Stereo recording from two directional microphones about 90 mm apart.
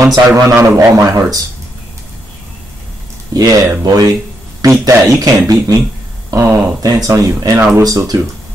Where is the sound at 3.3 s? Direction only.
45° right (ahead or behind).